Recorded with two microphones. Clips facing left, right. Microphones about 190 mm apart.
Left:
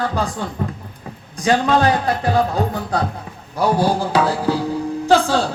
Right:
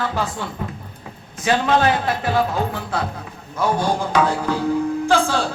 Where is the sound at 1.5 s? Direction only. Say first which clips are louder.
Left 2 dB; 40° left (ahead or behind).